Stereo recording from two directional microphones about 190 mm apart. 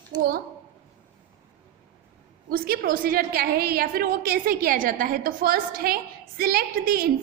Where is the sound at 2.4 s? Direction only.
50° right (ahead or behind).